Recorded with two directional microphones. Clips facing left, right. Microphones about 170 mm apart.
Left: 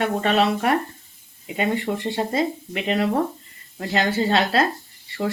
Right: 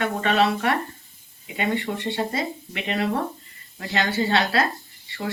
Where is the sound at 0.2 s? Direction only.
40° left (ahead or behind).